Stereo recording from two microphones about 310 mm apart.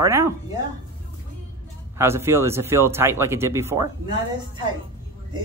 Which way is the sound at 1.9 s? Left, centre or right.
Centre.